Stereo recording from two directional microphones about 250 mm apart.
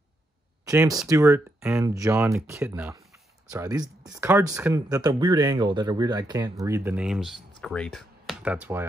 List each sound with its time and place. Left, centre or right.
0.7 s speech: centre